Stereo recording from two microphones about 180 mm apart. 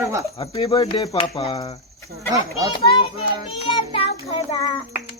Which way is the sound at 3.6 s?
30° left (ahead or behind).